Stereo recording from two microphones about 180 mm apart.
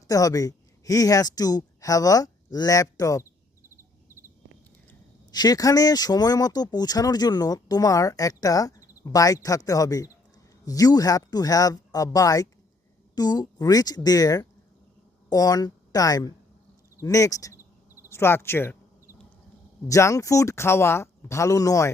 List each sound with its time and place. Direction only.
0.1 s speech: 20° left (ahead or behind)
5.3 s a woman's voice: 20° left (ahead or behind)
19.9 s speech: 15° left (ahead or behind)